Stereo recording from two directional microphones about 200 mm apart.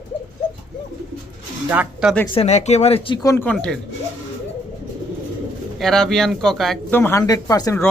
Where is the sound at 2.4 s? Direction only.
35° left (ahead or behind); by 3.7 s 5° left (ahead or behind).